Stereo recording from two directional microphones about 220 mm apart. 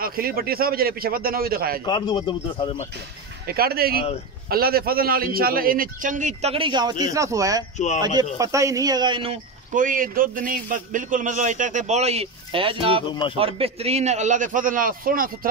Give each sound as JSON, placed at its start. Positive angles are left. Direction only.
{"t": 0.0, "sound": "a man's voice", "side_deg": -40}
{"t": 1.9, "sound": "speech", "side_deg": 20}
{"t": 3.4, "sound": "a man's voice", "side_deg": -45}
{"t": 7.7, "sound": "speech", "side_deg": 30}
{"t": 8.0, "sound": "speech", "side_deg": -20}
{"t": 9.8, "sound": "a man's voice", "side_deg": -40}
{"t": 13.0, "sound": "speech", "side_deg": 20}
{"t": 13.4, "sound": "a man's voice", "side_deg": -25}